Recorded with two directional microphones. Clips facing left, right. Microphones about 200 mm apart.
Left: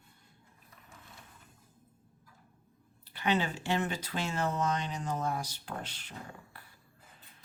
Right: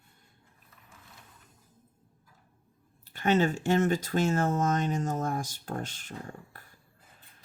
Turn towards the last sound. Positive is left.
turn(degrees=-45)  # may be behind; listen again after turning